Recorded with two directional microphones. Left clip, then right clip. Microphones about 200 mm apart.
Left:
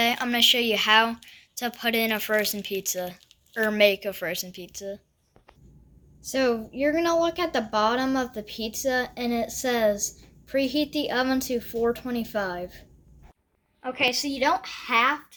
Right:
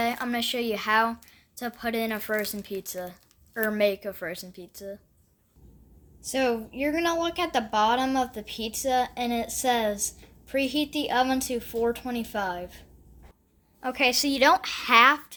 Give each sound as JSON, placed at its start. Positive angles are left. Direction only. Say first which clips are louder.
{"t": 0.0, "sound": "a woman's voice", "louder": "left 6 dB", "side_deg": -10}
{"t": 6.2, "sound": "a woman's voice", "louder": "left 2 dB", "side_deg": -5}
{"t": 13.8, "sound": "a woman's voice", "louder": "right 1 dB", "side_deg": -65}